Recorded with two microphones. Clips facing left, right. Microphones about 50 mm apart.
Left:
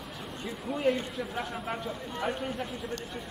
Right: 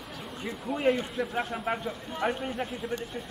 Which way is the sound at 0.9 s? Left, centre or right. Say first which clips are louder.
Right 3 dB; centre.